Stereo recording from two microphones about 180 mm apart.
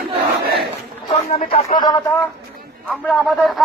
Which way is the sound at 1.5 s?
40° left (ahead or behind).